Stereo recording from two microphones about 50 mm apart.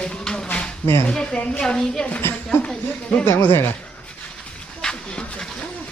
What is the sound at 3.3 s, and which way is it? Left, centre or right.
Speech, left.